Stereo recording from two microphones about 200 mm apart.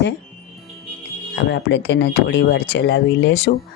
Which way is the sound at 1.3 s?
60° left (ahead or behind).